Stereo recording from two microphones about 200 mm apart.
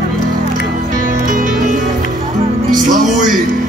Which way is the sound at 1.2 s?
40° right (ahead or behind).